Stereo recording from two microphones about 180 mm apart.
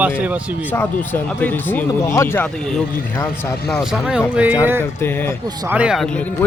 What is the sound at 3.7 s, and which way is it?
Speech, centre (ahead or behind).